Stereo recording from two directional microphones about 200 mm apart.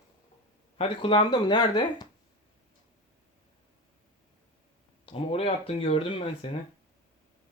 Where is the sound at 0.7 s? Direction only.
25° left (ahead or behind).